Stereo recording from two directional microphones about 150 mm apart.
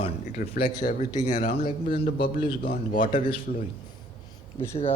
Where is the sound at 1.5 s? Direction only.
80° left.